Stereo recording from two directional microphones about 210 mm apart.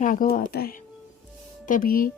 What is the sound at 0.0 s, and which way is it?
Speech, 40° left (ahead or behind).